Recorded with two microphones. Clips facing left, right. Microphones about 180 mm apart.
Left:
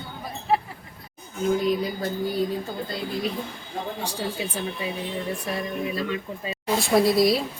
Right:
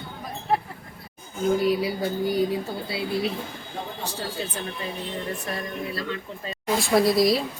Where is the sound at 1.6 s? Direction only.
10° right (ahead or behind).